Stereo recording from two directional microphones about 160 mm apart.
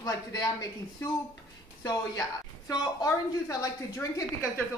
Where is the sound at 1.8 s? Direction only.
20° left (ahead or behind).